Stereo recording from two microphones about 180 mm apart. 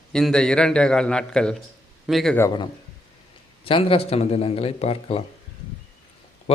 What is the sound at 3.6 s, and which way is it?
A man's voice, 30° left (ahead or behind).